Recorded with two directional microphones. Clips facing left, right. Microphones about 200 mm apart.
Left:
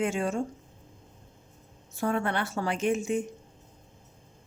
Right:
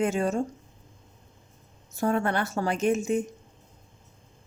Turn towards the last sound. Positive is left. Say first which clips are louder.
# right 3 dB
turn(degrees=-40)  # may be behind; listen again after turning